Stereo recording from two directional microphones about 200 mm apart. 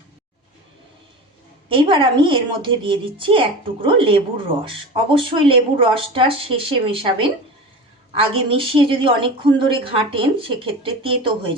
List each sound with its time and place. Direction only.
1.7 s a woman's voice: 25° right (ahead or behind)
8.3 s a woman's voice: 25° right (ahead or behind)